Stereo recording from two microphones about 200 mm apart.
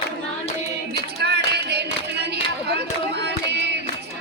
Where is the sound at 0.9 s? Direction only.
55° right (ahead or behind).